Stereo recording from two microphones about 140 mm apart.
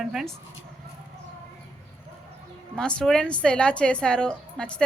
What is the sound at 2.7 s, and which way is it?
A woman's voice, 5° left (ahead or behind).